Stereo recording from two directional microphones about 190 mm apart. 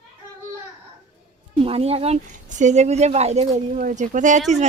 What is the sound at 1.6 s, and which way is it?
A woman's voice, 30° right (ahead or behind).